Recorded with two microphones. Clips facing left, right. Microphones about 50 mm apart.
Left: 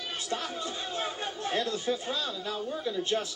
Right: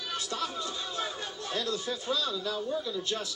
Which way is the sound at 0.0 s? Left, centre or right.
Left.